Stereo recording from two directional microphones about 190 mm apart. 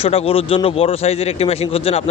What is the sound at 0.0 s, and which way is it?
Speech, 30° left (ahead or behind).